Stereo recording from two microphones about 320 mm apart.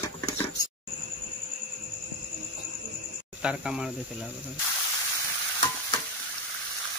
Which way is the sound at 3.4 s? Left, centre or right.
Centre.